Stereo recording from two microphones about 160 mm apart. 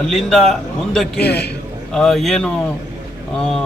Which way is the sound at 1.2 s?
90° left.